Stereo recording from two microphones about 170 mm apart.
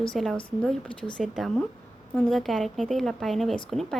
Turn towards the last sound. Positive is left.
turn(degrees=0)  # may be behind; listen again after turning